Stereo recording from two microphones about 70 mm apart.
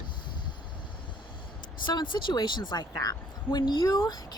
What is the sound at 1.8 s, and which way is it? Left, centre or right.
Speech, left.